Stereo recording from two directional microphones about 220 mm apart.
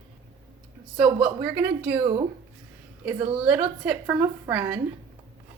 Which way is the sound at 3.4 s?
5° right (ahead or behind).